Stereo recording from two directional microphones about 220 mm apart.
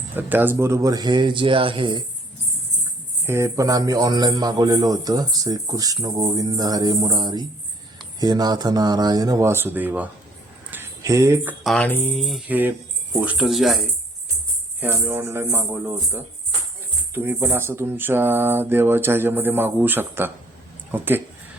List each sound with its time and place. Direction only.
0.2 s speech: 10° right (ahead or behind)
3.2 s speech: 10° right (ahead or behind)
10.7 s a sound: 10° right (ahead or behind)
11.6 s speech: 5° left (ahead or behind)
17.2 s speech: 10° right (ahead or behind)